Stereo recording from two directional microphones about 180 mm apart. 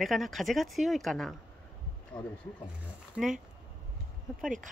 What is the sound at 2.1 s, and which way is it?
Speech, 25° left (ahead or behind).